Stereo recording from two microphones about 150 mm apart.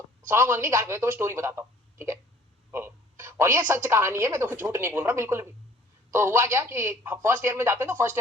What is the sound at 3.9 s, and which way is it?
Speech, 15° right (ahead or behind).